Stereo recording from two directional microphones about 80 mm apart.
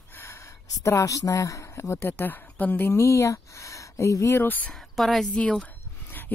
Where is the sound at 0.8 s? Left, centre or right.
Left.